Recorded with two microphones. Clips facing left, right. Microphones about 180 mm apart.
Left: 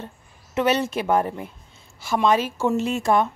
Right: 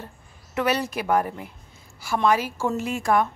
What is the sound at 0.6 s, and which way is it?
A woman's voice, 25° left (ahead or behind).